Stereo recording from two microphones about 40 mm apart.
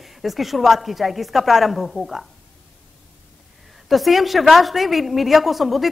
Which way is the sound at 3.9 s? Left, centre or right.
Centre.